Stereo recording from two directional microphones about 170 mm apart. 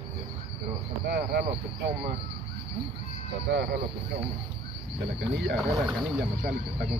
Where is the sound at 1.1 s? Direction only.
60° right (ahead or behind).